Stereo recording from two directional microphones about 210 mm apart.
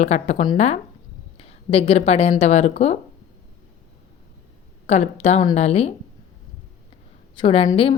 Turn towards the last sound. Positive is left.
turn(degrees=25)  # may be behind; listen again after turning